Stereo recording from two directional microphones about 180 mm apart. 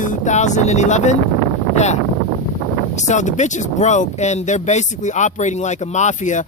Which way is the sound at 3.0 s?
40° left (ahead or behind).